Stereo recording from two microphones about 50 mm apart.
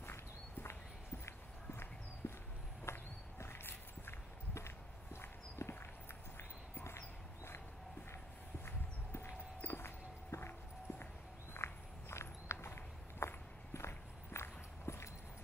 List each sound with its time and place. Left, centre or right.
0.0 s walk: left
8.6 s walk: left
10.3 s a sound: left
11.5 s walk: left